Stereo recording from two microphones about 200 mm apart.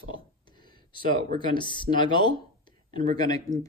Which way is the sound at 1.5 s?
25° left (ahead or behind).